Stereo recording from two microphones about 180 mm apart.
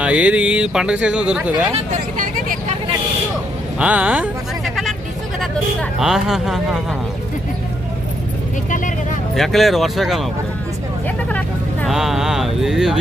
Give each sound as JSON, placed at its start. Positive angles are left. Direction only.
{"t": 0.0, "sound": "speech", "side_deg": -5}
{"t": 1.7, "sound": "speech", "side_deg": -45}
{"t": 3.8, "sound": "a sound", "side_deg": -5}
{"t": 6.0, "sound": "speech", "side_deg": 0}
{"t": 9.3, "sound": "speech", "side_deg": 0}
{"t": 11.3, "sound": "vehicle", "side_deg": 10}
{"t": 11.9, "sound": "speech", "side_deg": 0}